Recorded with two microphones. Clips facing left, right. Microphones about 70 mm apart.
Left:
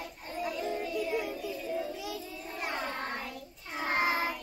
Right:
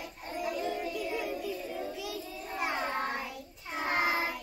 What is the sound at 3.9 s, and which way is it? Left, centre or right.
Child singing, left.